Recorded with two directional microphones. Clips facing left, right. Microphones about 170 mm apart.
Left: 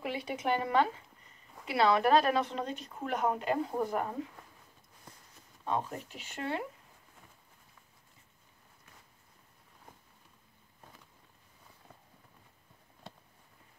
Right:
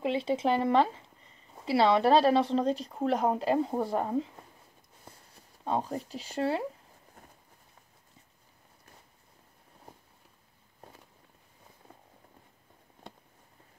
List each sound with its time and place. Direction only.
0.0 s speech: 25° right (ahead or behind)
5.1 s a sound: 30° right (ahead or behind)
5.7 s speech: 35° right (ahead or behind)